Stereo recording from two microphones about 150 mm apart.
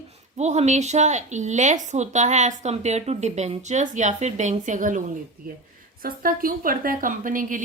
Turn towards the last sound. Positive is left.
turn(degrees=-65)  # may be behind; listen again after turning